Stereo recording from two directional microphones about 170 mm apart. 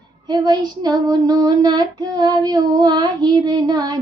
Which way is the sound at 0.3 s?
25° right (ahead or behind).